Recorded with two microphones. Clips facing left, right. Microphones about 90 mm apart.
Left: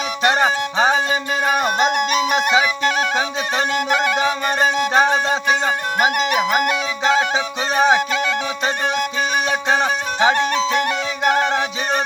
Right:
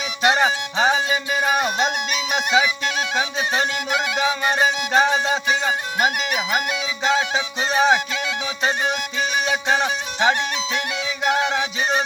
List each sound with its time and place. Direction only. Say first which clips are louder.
0.2 s music: left 1 dB; 50° left (ahead or behind)